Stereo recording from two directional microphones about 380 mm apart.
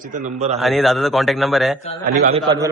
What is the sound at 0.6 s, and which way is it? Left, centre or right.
A man's voice, centre.